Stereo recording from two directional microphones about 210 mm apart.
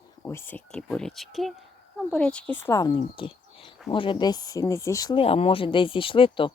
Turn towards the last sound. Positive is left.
turn(degrees=25)  # may be behind; listen again after turning